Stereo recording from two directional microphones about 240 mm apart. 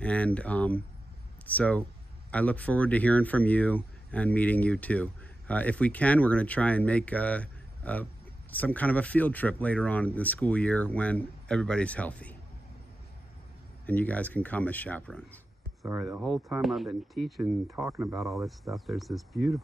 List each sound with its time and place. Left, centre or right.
0.0 s speech: centre
13.8 s speech: centre
15.8 s speech: centre